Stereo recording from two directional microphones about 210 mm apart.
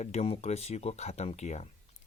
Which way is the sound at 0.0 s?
30° left (ahead or behind).